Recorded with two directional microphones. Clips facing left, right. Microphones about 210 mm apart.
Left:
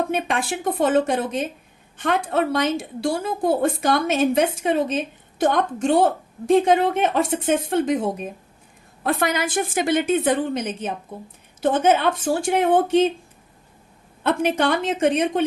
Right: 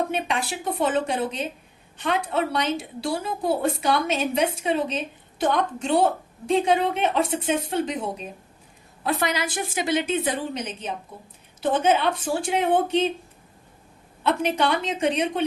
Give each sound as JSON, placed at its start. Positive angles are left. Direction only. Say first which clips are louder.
{"t": 0.1, "sound": "a woman's voice", "louder": "left 3 dB", "side_deg": 50}
{"t": 14.3, "sound": "a woman's voice", "louder": "left 3 dB", "side_deg": 50}